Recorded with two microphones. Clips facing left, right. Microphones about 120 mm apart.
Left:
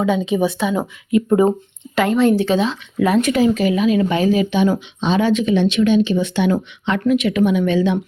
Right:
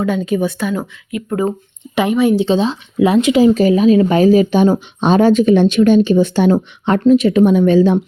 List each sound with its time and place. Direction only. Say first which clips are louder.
0.0 s speech: right 1 dB; centre (ahead or behind)
1.1 s speech: left 4 dB; 30° left (ahead or behind)
2.0 s speech: right 1 dB; 15° right (ahead or behind)
2.4 s speech: right 3 dB; 25° right (ahead or behind)
3.5 s speech: right 5 dB; 35° right (ahead or behind)
7.0 s speech: right 6 dB; 30° right (ahead or behind)